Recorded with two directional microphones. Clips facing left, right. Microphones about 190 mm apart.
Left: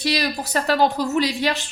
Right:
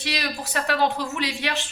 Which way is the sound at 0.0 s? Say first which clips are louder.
Left 6 dB; 35° left (ahead or behind).